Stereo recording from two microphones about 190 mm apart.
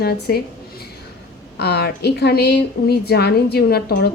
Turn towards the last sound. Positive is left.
turn(degrees=55)  # may be behind; listen again after turning